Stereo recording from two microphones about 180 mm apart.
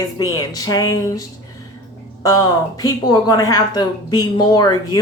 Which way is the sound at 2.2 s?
20° left (ahead or behind).